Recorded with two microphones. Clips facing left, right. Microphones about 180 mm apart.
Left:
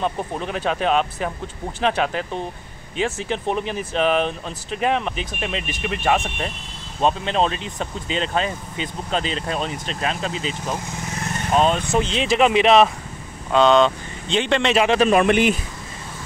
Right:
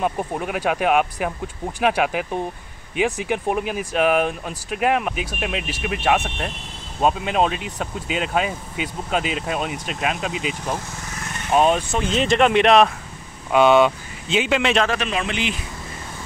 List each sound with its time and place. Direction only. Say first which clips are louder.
0.0 s speech: right 1 dB; 10° right (ahead or behind)
11.9 s speech: even; centre (ahead or behind)
13.5 s speech: right 1 dB; 10° right (ahead or behind)
15.0 s speech: left 9 dB; 50° left (ahead or behind)